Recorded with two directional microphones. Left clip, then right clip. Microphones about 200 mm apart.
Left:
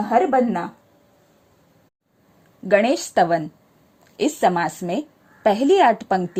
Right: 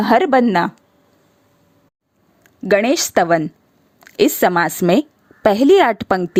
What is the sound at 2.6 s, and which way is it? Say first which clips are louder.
A woman's voice: right 3 dB; 35° right (ahead or behind).